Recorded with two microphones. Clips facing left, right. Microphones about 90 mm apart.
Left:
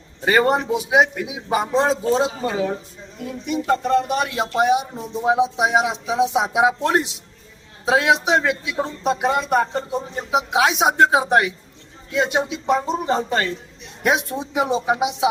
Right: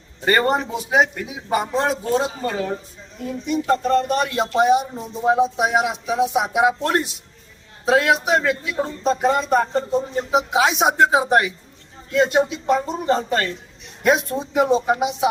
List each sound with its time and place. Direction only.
0.3 s a man's voice: 5° left (ahead or behind)
5.4 s speech: 20° left (ahead or behind); by 11.5 s centre (ahead or behind)
12.1 s a man's voice: 15° left (ahead or behind)